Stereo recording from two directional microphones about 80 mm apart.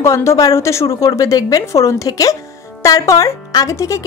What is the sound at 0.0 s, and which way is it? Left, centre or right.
A woman's voice, left.